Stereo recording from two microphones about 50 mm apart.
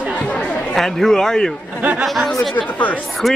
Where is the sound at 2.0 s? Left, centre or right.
Centre.